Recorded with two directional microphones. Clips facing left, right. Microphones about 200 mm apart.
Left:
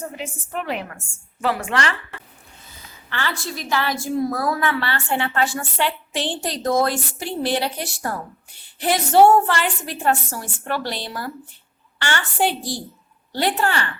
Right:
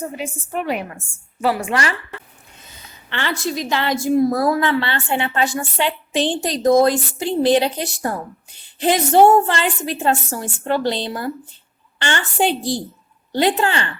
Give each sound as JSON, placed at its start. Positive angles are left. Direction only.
{"t": 0.0, "sound": "a woman's voice", "side_deg": -10}